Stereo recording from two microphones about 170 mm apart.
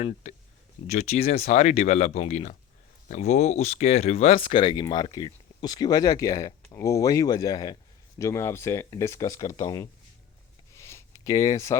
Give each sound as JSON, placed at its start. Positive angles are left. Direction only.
{"t": 0.0, "sound": "speech", "side_deg": 45}
{"t": 10.8, "sound": "a sound", "side_deg": 15}
{"t": 11.2, "sound": "speech", "side_deg": 20}